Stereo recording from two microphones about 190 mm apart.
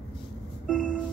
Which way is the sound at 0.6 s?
5° left (ahead or behind).